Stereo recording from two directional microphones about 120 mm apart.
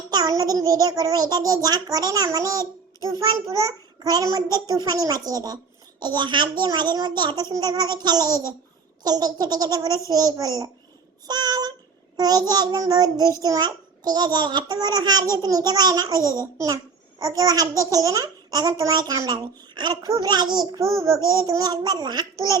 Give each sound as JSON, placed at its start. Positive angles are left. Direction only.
{"t": 0.1, "sound": "a child's voice", "side_deg": -30}
{"t": 11.3, "sound": "child singing", "side_deg": -35}
{"t": 12.1, "sound": "a child's voice", "side_deg": -30}